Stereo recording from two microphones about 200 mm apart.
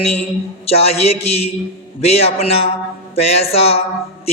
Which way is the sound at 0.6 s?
30° left (ahead or behind).